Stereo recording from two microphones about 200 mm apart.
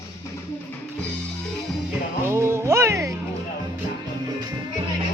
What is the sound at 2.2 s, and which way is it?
Speech, 15° right (ahead or behind).